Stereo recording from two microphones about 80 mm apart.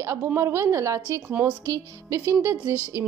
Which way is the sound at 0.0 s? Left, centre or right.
Right.